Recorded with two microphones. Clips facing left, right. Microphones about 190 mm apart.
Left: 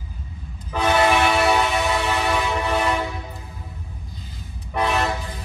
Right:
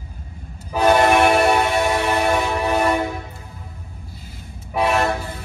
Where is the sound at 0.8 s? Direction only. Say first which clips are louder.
Right 4 dB; 50° right (ahead or behind).